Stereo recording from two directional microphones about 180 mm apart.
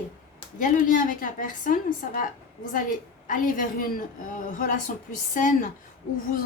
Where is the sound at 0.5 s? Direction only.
50° left (ahead or behind).